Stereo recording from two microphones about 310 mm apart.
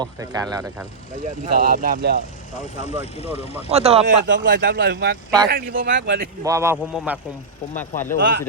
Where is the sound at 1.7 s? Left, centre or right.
Right.